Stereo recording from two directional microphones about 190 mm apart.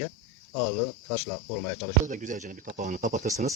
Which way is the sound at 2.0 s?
40° right (ahead or behind).